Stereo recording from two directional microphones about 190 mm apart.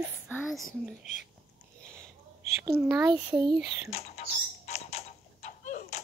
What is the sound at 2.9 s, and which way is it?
Speech, 20° right (ahead or behind).